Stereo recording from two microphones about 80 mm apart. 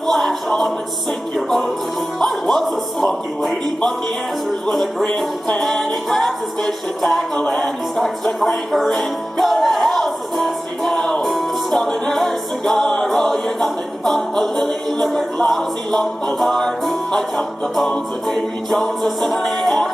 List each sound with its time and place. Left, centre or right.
0.0 s music: centre
2.1 s music: centre
5.5 s music: centre